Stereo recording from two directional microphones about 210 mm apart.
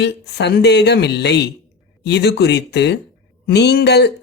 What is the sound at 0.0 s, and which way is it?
Speech, 55° left (ahead or behind).